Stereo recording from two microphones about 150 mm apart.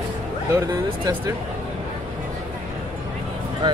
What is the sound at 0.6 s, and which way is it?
Speech, 25° right (ahead or behind).